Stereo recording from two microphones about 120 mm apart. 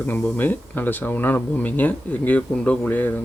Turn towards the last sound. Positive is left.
turn(degrees=15)  # may be behind; listen again after turning